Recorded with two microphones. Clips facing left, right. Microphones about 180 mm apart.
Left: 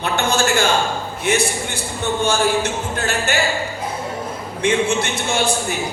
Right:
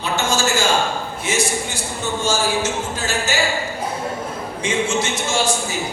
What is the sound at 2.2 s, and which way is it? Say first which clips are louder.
Speech: left 2 dB; 60° left (ahead or behind).